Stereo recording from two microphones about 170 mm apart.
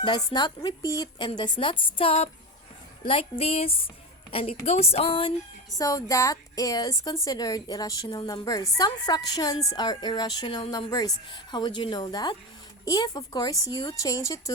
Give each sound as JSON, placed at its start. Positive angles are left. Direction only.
{"t": 0.3, "sound": "a woman's voice", "side_deg": 25}
{"t": 5.7, "sound": "a woman's voice", "side_deg": 20}